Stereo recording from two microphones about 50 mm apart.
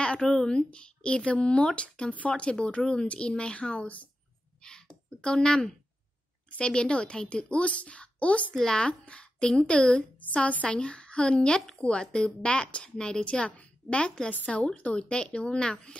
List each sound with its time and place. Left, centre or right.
0.0 s a sound: left
0.3 s a woman's voice: centre
4.6 s a sound: centre
6.6 s a woman's voice: centre
8.5 s speech: centre
8.8 s a woman's voice: left
10.2 s a woman's voice: left